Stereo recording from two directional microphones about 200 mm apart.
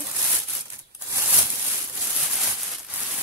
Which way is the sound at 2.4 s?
Centre (ahead or behind).